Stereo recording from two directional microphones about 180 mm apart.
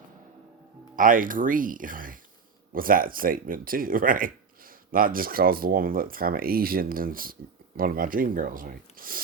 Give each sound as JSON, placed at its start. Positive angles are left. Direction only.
{"t": 0.9, "sound": "speech", "side_deg": -50}